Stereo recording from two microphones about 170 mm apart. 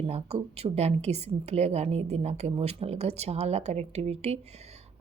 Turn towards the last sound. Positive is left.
turn(degrees=-35)  # may be behind; listen again after turning